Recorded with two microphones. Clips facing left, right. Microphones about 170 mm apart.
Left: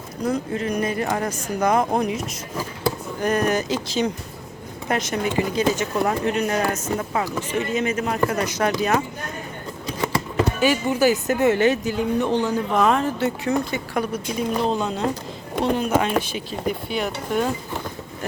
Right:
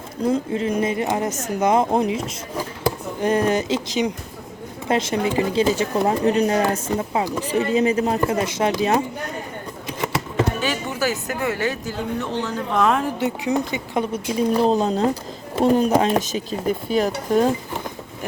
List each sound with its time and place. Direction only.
0.3 s speech: 25° right (ahead or behind)
7.5 s speech: 35° right (ahead or behind)
10.6 s speech: 15° left (ahead or behind)
12.7 s speech: centre (ahead or behind)
13.1 s speech: 15° right (ahead or behind); by 17.5 s 35° right (ahead or behind)